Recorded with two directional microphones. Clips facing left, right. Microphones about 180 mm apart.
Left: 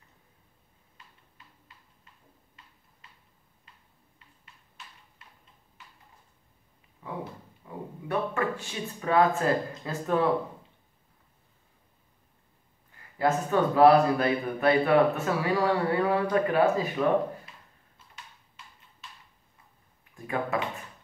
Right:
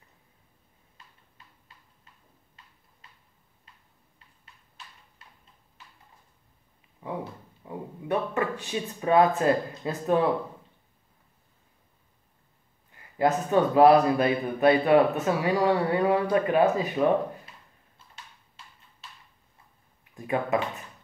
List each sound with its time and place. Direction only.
7.6 s a sound: 20° right (ahead or behind)
8.1 s speech: 20° right (ahead or behind)
13.2 s speech: 20° right (ahead or behind)
20.2 s speech: 20° right (ahead or behind)